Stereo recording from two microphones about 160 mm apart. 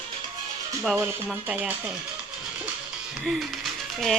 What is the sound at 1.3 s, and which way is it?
Speech, 5° right (ahead or behind).